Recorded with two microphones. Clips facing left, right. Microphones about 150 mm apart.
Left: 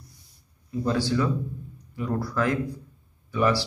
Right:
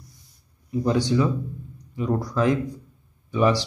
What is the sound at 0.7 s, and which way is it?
Speech, 15° right (ahead or behind).